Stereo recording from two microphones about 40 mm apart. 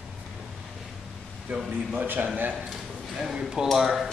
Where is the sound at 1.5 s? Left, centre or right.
Right.